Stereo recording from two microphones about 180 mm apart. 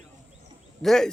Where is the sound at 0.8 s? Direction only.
5° left (ahead or behind).